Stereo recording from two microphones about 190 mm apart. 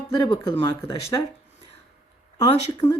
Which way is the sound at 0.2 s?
25° left (ahead or behind).